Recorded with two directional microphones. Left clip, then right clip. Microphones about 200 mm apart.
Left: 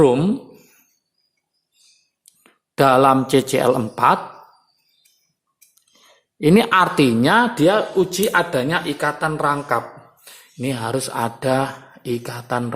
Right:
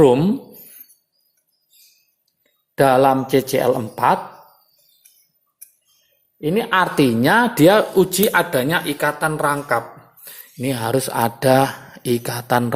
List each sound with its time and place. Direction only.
0.0 s speech: 5° right (ahead or behind)
2.7 s speech: centre (ahead or behind)
6.4 s speech: 15° left (ahead or behind)
6.7 s speech: centre (ahead or behind)
7.5 s speech: 15° right (ahead or behind)